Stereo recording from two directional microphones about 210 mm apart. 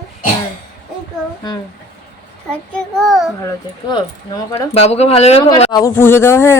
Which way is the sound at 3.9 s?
20° left (ahead or behind).